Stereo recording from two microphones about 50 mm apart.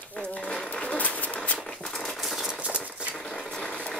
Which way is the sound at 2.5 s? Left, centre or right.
Right.